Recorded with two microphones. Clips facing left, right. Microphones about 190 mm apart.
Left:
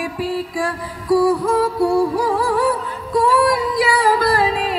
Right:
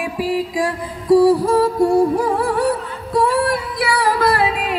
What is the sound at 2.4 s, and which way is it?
Music, 60° right (ahead or behind).